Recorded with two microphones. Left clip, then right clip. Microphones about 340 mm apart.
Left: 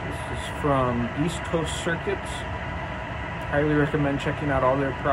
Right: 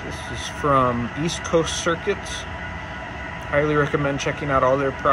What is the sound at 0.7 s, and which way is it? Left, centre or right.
Speech, right.